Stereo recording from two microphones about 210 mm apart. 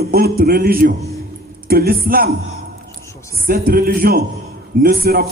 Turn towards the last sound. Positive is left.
turn(degrees=-45)  # may be behind; listen again after turning